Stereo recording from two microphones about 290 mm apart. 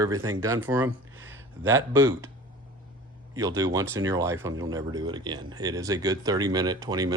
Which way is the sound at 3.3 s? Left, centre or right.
Centre.